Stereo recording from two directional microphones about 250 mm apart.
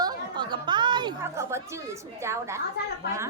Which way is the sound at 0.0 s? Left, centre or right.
Centre.